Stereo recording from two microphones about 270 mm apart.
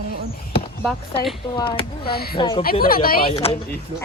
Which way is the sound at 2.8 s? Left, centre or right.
Left.